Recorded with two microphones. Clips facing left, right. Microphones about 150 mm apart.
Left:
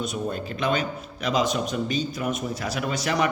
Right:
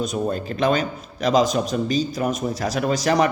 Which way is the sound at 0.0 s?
40° right (ahead or behind).